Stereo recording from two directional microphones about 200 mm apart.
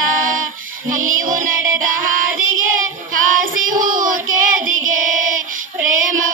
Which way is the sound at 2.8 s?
40° right (ahead or behind).